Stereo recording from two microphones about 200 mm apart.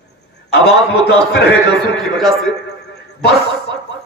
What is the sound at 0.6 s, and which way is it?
Speech, 55° left (ahead or behind).